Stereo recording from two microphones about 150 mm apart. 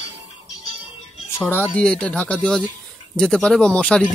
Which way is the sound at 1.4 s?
10° left (ahead or behind).